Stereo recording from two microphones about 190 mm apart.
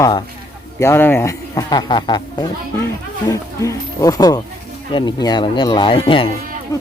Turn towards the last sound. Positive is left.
turn(degrees=15)  # may be behind; listen again after turning